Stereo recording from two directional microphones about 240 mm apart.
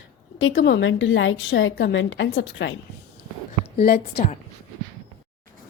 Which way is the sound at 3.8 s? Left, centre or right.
Left.